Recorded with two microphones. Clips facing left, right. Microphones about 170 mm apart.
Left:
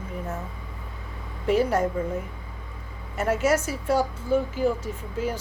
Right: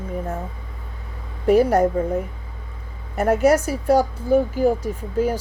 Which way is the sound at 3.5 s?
35° right (ahead or behind).